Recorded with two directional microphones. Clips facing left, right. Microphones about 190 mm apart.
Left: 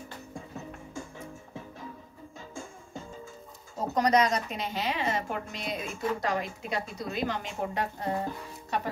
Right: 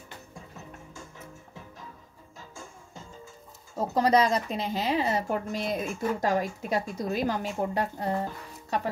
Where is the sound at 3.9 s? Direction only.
30° right (ahead or behind).